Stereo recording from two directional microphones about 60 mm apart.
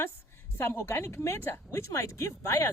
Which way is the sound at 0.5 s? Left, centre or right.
Left.